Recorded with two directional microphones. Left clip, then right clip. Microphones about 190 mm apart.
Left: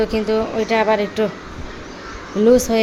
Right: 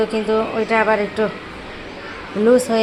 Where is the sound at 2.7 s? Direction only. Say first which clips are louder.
Even; 15° left (ahead or behind).